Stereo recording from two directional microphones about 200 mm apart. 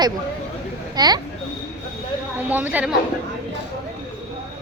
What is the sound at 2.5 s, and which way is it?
Speech, 10° right (ahead or behind).